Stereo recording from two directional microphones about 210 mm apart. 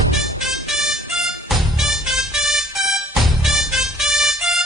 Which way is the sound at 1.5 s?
Centre (ahead or behind).